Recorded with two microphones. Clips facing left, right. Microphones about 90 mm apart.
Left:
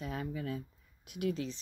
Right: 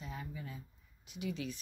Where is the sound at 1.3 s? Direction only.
35° left (ahead or behind).